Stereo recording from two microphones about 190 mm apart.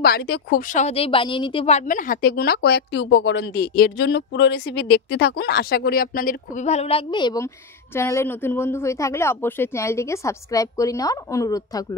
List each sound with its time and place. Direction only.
0.0 s a woman's voice: 55° left (ahead or behind); by 12.0 s 20° left (ahead or behind)